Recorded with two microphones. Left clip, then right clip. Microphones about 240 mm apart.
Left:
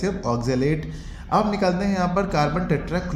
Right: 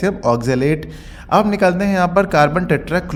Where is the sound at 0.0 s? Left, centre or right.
Right.